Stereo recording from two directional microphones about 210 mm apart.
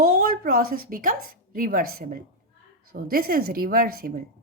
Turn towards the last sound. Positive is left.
turn(degrees=-45)  # may be behind; listen again after turning